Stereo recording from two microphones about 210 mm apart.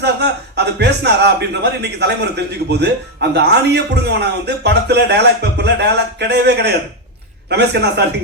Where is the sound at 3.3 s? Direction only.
55° right (ahead or behind).